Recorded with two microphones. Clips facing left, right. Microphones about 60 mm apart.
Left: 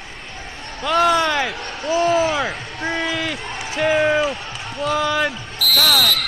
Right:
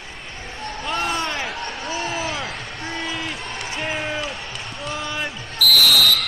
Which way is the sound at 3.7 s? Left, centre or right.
Left.